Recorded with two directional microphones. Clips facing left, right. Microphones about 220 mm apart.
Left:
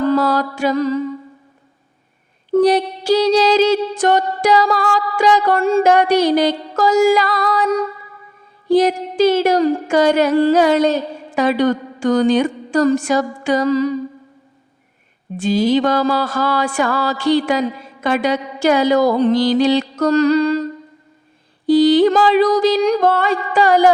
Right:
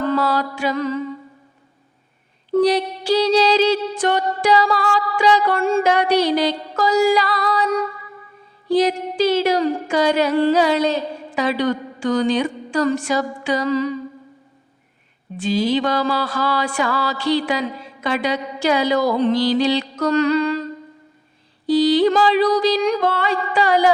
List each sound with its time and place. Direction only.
0.1 s music: 45° left (ahead or behind)
2.5 s music: 50° left (ahead or behind)
8.7 s music: 50° left (ahead or behind)
15.4 s music: 45° left (ahead or behind)
21.7 s music: 50° left (ahead or behind)